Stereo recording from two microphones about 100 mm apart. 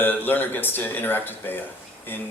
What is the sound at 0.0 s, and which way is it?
A man's voice, 20° left (ahead or behind).